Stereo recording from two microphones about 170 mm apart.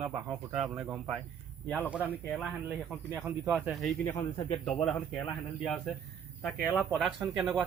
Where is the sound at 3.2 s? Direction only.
5° right (ahead or behind).